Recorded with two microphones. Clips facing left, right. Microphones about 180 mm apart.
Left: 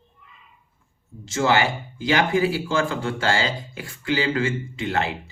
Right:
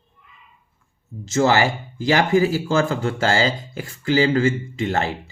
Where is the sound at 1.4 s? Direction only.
40° right (ahead or behind).